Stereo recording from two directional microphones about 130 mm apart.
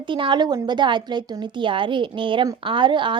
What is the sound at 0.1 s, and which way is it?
A woman's voice, 40° right (ahead or behind).